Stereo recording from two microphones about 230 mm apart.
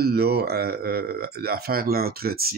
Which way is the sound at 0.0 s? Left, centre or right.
Right.